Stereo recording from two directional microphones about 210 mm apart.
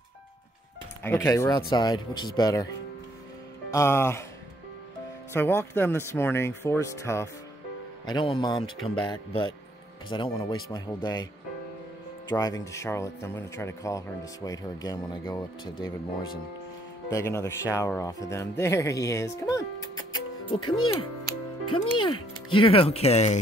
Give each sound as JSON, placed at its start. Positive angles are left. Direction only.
{"t": 1.0, "sound": "speech", "side_deg": 10}
{"t": 3.7, "sound": "speech", "side_deg": 10}
{"t": 5.3, "sound": "speech", "side_deg": 10}
{"t": 12.3, "sound": "speech", "side_deg": 15}
{"t": 17.1, "sound": "speech", "side_deg": 15}
{"t": 20.9, "sound": "music", "side_deg": 25}
{"t": 21.9, "sound": "speech", "side_deg": 25}